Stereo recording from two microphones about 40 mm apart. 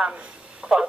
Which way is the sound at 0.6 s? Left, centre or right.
Right.